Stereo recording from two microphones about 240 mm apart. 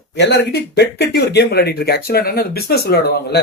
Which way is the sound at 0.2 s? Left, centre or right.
Left.